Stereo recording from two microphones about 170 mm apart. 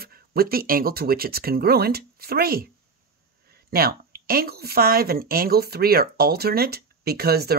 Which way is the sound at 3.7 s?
60° right (ahead or behind).